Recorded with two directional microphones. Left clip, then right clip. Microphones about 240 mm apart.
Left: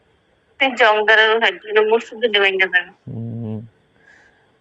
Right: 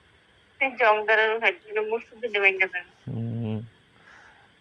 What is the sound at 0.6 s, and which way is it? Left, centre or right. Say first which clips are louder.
A woman's voice: left 7 dB; left.